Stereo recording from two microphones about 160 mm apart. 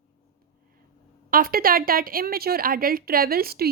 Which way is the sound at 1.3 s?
65° right (ahead or behind).